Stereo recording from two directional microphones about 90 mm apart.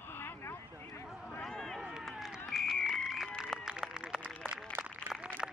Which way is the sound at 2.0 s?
5° right (ahead or behind).